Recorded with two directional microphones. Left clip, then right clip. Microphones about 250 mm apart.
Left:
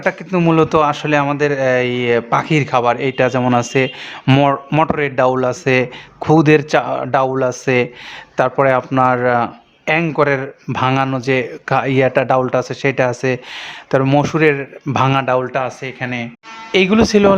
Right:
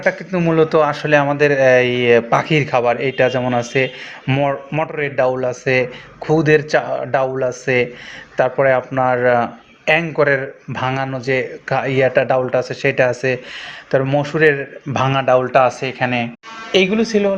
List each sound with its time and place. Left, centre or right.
0.0 s speech: left
15.5 s speech: centre
16.7 s speech: left